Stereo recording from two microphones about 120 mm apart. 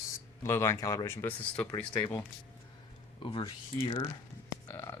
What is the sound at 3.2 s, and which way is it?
Speech, 45° left (ahead or behind).